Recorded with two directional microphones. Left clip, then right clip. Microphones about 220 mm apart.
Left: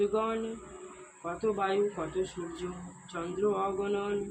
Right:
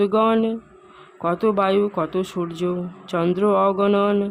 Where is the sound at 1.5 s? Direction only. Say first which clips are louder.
Right 11 dB; 50° right (ahead or behind).